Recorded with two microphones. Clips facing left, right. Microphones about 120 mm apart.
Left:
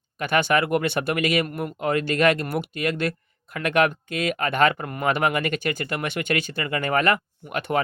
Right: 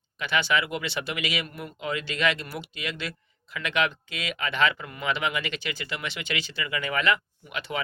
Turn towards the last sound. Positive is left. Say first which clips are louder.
# left 8 dB
turn(degrees=50)  # may be behind; listen again after turning